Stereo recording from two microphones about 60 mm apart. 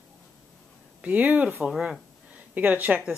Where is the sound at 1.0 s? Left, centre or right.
Right.